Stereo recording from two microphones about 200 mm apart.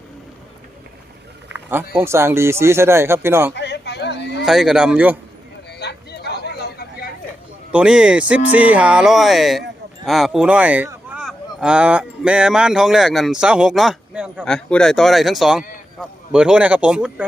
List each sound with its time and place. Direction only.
1.5 s speech: 10° right (ahead or behind)
3.5 s a sound: 60° left (ahead or behind)
4.4 s speech: centre (ahead or behind)
5.8 s vehicle: 55° left (ahead or behind)
7.7 s speech: 5° right (ahead or behind)